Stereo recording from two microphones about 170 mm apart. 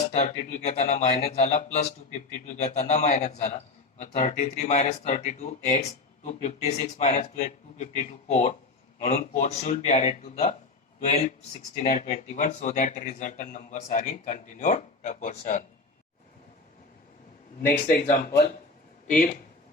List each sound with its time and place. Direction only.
0.1 s a man's voice: 40° left (ahead or behind)
17.7 s speech: 50° left (ahead or behind)
19.0 s speech: 55° left (ahead or behind)